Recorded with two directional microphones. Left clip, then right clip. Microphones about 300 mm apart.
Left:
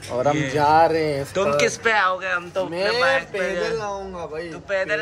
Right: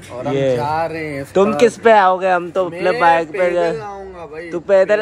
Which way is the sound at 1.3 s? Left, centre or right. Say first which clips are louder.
Right 8 dB; centre.